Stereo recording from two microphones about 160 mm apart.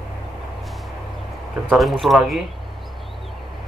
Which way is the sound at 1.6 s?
Centre (ahead or behind).